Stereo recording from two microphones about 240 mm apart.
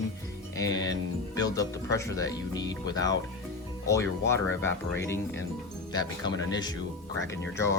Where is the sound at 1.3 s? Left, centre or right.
Centre.